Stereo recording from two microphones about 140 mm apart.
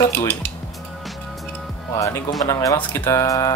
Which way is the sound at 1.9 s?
20° left (ahead or behind).